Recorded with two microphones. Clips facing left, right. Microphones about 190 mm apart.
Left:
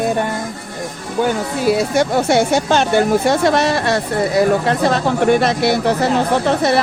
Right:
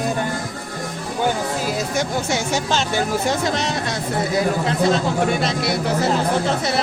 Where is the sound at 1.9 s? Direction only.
60° left (ahead or behind).